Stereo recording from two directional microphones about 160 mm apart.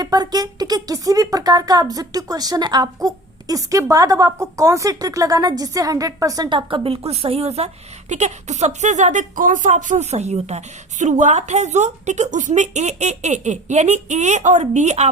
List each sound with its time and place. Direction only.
0.0 s speech: 25° right (ahead or behind); by 15.1 s 45° right (ahead or behind)